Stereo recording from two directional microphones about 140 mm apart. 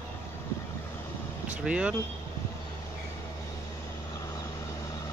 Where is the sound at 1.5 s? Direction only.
10° right (ahead or behind).